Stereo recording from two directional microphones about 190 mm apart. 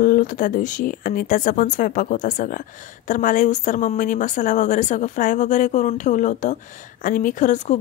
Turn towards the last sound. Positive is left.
turn(degrees=40)  # may be behind; listen again after turning